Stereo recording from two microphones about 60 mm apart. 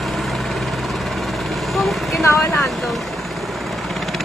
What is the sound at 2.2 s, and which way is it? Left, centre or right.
Vehicle, left.